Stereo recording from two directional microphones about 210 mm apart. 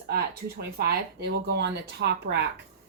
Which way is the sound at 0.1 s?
50° right (ahead or behind).